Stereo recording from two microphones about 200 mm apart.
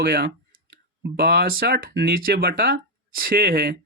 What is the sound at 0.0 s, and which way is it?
Speech, 50° right (ahead or behind).